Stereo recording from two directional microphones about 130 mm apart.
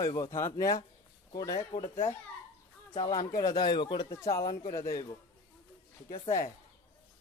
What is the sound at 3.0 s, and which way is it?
Speech, 25° left (ahead or behind).